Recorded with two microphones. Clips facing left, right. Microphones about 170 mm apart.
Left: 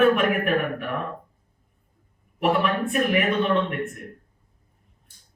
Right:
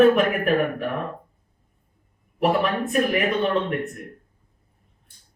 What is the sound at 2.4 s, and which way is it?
Speech, 40° right (ahead or behind).